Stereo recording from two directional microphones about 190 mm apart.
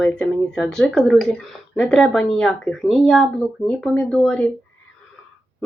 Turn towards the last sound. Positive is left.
turn(degrees=5)  # may be behind; listen again after turning